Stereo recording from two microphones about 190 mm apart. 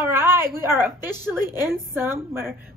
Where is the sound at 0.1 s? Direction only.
15° right (ahead or behind).